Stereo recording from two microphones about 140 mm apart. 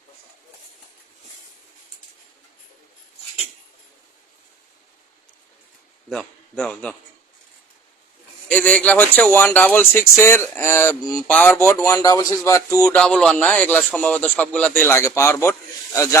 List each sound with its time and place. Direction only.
6.1 s a man's voice: 5° left (ahead or behind)
8.4 s speech: 10° left (ahead or behind)
12.9 s speech: 5° left (ahead or behind)